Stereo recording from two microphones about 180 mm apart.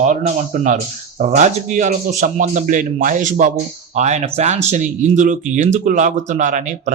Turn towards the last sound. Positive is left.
turn(degrees=-45)  # may be behind; listen again after turning